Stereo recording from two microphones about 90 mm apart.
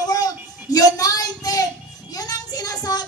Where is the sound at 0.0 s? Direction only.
45° left (ahead or behind).